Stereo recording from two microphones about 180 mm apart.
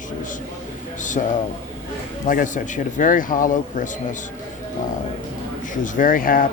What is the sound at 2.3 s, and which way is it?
Speech, 45° left (ahead or behind).